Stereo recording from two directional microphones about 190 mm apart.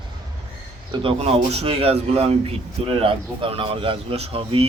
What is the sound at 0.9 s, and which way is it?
Speech, 30° right (ahead or behind).